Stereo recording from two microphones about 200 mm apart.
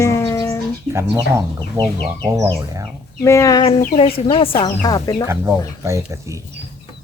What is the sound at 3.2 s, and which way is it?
Speech, 15° left (ahead or behind).